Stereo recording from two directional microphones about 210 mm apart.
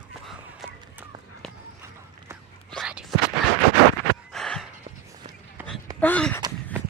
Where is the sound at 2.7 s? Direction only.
5° right (ahead or behind).